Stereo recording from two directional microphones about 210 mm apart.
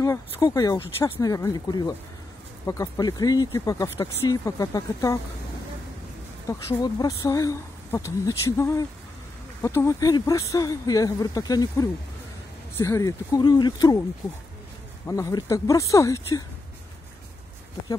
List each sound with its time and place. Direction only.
0.0 s speech: 15° left (ahead or behind)
6.7 s speech: 15° left (ahead or behind)
15.0 s speech: 15° left (ahead or behind)